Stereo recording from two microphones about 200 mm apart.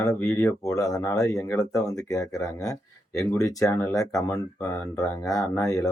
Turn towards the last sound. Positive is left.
turn(degrees=15)  # may be behind; listen again after turning